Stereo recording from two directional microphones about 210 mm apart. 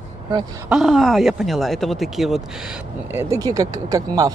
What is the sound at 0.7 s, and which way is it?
Speech, centre (ahead or behind).